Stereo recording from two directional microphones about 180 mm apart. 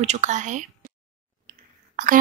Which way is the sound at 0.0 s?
40° right (ahead or behind).